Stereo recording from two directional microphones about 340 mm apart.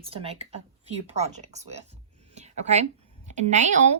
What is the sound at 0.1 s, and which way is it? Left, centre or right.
A woman's voice, centre.